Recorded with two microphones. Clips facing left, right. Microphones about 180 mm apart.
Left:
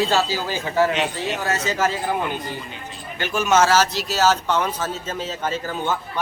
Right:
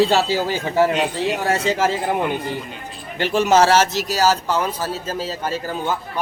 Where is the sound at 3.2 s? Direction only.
30° right (ahead or behind).